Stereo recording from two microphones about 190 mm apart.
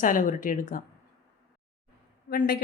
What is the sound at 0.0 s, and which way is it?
Speech, 45° left (ahead or behind).